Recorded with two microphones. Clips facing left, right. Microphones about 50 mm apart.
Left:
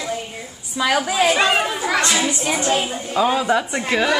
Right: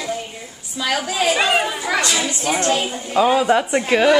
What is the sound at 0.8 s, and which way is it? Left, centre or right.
Speech, centre.